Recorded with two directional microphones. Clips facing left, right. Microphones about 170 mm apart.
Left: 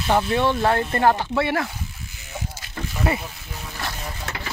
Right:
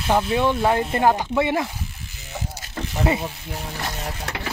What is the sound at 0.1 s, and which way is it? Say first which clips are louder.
Speech: even; 10° right (ahead or behind).